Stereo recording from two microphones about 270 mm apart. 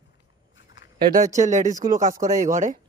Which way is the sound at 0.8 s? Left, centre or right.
Left.